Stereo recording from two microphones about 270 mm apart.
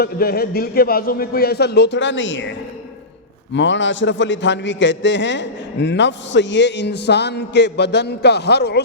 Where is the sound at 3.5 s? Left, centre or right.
Left.